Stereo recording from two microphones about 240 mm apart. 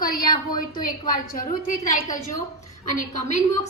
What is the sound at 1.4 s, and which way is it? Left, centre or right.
Speech, left.